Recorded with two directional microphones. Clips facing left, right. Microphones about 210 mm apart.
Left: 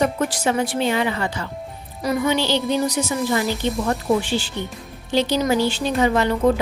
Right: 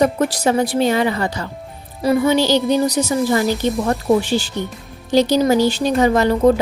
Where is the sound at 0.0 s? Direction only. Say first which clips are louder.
Right 4 dB; 40° right (ahead or behind).